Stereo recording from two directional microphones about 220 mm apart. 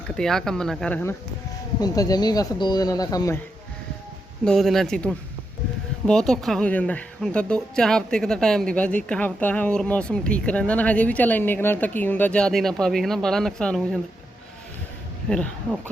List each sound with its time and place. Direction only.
0.2 s speech: centre (ahead or behind)
1.8 s speech: 15° left (ahead or behind)
4.4 s speech: centre (ahead or behind)
15.3 s speech: 5° left (ahead or behind)